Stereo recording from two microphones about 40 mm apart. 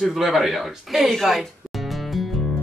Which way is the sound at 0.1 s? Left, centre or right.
Centre.